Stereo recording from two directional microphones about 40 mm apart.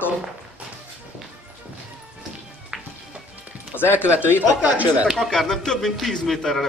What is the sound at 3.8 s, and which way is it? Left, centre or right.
Speech, left.